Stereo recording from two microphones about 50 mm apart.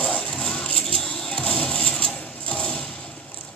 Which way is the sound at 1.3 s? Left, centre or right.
Left.